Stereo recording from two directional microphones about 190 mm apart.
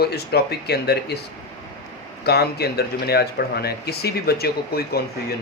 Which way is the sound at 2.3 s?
55° left (ahead or behind).